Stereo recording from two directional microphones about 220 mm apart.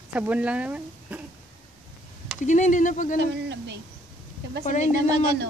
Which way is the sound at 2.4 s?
35° left (ahead or behind).